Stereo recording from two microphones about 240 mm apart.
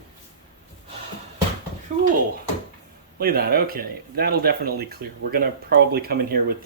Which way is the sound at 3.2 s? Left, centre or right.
Right.